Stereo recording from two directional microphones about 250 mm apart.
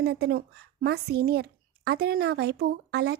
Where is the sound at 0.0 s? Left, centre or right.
Right.